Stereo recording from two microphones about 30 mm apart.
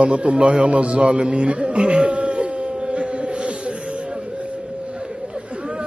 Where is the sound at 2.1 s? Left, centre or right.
Right.